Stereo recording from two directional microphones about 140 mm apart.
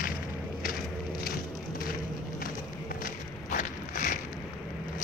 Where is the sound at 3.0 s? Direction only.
70° left (ahead or behind).